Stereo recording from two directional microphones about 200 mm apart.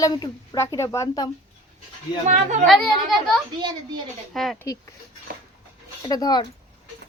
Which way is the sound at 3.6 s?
25° right (ahead or behind).